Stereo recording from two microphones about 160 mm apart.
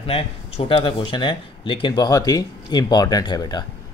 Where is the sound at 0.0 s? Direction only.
35° left (ahead or behind).